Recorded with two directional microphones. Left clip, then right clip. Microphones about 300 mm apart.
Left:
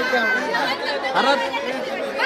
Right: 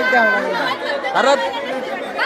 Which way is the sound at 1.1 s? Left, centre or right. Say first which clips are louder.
Right 4 dB; centre.